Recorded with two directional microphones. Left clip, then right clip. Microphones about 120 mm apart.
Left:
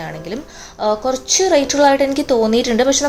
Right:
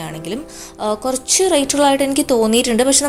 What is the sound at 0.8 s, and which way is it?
A woman's voice, 40° right (ahead or behind).